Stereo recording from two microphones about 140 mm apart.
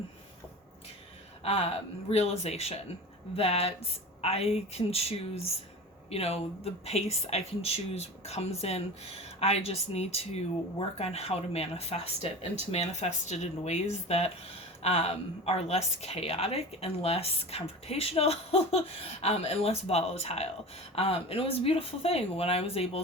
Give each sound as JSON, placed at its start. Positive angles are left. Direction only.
{"t": 1.5, "sound": "speech", "side_deg": 45}